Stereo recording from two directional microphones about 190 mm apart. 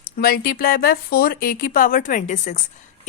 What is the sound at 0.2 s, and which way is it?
A woman's voice, 50° left (ahead or behind).